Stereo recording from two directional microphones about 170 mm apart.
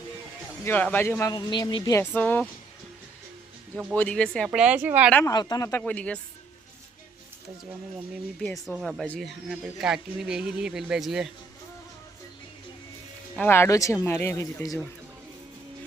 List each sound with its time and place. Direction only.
0.6 s speech: 10° left (ahead or behind)
3.9 s speech: 10° left (ahead or behind)
4.5 s a woman's voice: 5° right (ahead or behind)
5.2 s speech: 25° left (ahead or behind)
5.8 s speech: 5° left (ahead or behind)
7.6 s speech: 5° right (ahead or behind)
13.3 s speech: 10° left (ahead or behind)